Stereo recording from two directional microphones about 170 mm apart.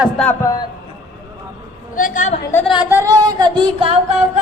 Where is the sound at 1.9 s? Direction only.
50° left (ahead or behind).